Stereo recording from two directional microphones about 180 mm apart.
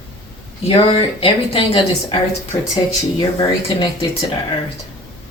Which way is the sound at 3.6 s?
25° left (ahead or behind).